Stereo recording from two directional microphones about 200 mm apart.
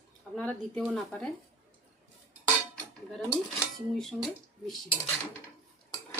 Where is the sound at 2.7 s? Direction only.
10° left (ahead or behind).